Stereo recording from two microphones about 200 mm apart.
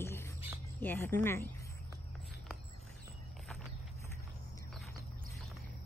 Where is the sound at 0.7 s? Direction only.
10° left (ahead or behind).